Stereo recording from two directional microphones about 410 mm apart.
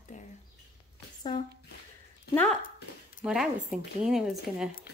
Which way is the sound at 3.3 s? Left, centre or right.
Centre.